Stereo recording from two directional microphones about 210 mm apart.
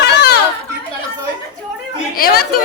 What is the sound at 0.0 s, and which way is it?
Children playing, 50° left (ahead or behind).